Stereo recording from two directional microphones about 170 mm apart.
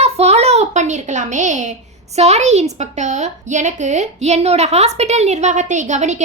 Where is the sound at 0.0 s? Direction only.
40° right (ahead or behind).